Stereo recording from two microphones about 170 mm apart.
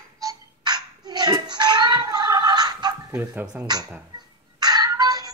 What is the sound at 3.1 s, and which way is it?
Speech, 10° right (ahead or behind).